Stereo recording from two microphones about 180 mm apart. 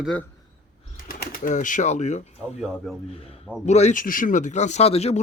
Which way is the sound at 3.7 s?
40° left (ahead or behind).